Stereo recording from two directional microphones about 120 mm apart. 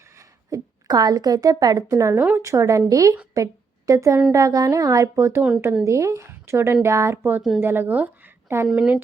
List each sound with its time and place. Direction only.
0.2 s a woman's voice: 30° right (ahead or behind); by 9.0 s 5° right (ahead or behind)